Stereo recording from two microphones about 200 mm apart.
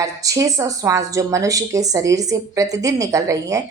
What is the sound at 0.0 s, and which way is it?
A woman's voice, 15° right (ahead or behind).